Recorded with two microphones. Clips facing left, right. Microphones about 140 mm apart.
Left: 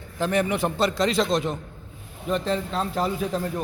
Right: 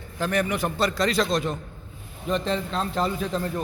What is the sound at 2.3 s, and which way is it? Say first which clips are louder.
A man's voice: left 1 dB; 5° left (ahead or behind).